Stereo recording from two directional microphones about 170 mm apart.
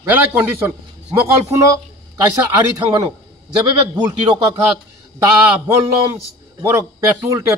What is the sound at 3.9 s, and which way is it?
Speech, 25° right (ahead or behind).